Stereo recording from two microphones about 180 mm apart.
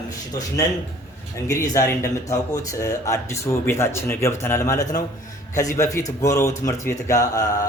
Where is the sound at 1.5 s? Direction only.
15° left (ahead or behind).